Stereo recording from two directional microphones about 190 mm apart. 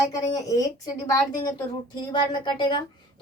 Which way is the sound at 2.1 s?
25° left (ahead or behind).